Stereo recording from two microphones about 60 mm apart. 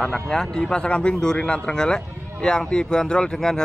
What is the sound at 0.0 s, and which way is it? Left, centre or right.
Speech, centre.